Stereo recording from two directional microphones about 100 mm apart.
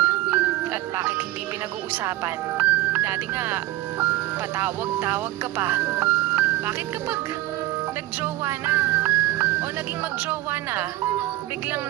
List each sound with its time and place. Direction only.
0.3 s music: 20° right (ahead or behind)
1.9 s speech: 20° right (ahead or behind)
8.2 s speech: 20° right (ahead or behind)